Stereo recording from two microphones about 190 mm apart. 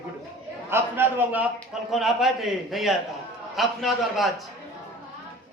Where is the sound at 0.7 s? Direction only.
10° right (ahead or behind).